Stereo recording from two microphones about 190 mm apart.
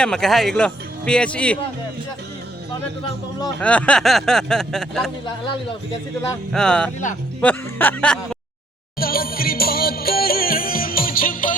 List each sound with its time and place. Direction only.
0.0 s speech: centre (ahead or behind)
3.6 s speech: 5° left (ahead or behind)
6.5 s speech: 5° left (ahead or behind)
9.0 s music: 50° left (ahead or behind)